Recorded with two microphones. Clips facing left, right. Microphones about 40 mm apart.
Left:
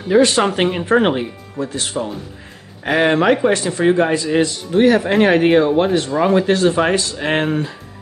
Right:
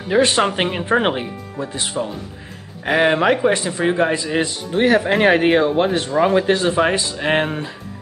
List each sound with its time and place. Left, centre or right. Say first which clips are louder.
0.1 s speech: left 3 dB; right
0.4 s speech: left 2 dB; centre
2.8 s speech: left 1 dB; centre